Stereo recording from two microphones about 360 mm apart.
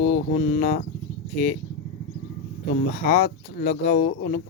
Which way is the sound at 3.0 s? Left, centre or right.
Left.